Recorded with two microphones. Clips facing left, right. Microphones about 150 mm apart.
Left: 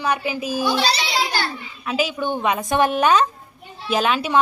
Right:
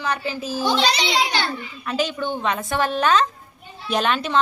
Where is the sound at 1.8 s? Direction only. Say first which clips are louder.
Left 2 dB; 5° left (ahead or behind).